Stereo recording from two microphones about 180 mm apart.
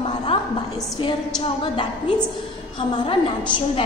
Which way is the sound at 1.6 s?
30° left (ahead or behind).